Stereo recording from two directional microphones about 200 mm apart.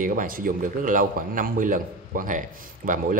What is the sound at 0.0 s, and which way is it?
Speech, 40° right (ahead or behind).